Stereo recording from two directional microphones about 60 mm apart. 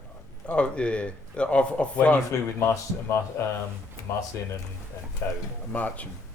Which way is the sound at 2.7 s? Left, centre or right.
Left.